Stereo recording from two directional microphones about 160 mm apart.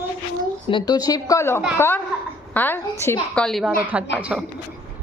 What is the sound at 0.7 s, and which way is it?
A woman's voice, 25° left (ahead or behind).